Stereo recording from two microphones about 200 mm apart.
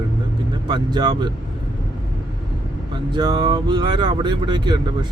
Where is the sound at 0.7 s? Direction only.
20° right (ahead or behind).